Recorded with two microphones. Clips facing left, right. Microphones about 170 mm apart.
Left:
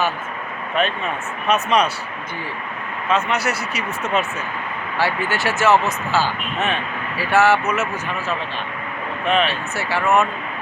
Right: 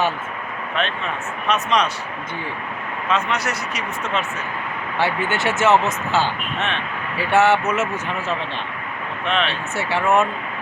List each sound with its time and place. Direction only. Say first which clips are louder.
0.8 s speech: left 3 dB; 5° left (ahead or behind)
3.1 s speech: left 2 dB; 5° left (ahead or behind)
4.9 s speech: even; 20° right (ahead or behind)
9.2 s speech: left 3 dB; 5° left (ahead or behind)
9.7 s speech: even; 25° right (ahead or behind)